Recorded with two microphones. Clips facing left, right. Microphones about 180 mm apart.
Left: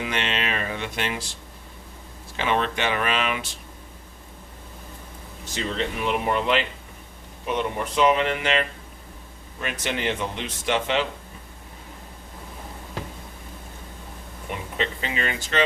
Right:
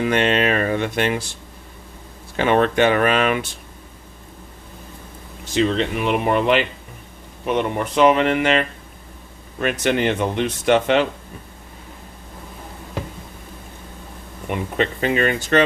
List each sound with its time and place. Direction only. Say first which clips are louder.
0.0 s speech: right 10 dB; 50° right (ahead or behind)
2.3 s speech: right 8 dB; 50° right (ahead or behind)
5.5 s speech: right 8 dB; 80° right; by 11.0 s 55° right (ahead or behind)
14.5 s speech: right 7 dB; 55° right (ahead or behind)